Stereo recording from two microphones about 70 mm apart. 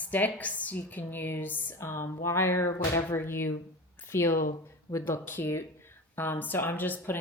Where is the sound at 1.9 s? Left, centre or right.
Left.